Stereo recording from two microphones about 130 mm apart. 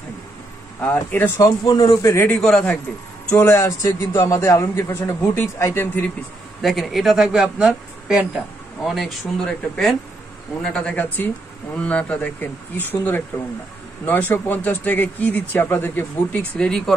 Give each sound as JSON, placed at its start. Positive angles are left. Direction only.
{"t": 0.9, "sound": "speech", "side_deg": 15}
{"t": 1.7, "sound": "a man's voice", "side_deg": 30}
{"t": 2.2, "sound": "speech", "side_deg": 5}
{"t": 3.3, "sound": "a man's voice", "side_deg": 15}
{"t": 6.6, "sound": "speech", "side_deg": 0}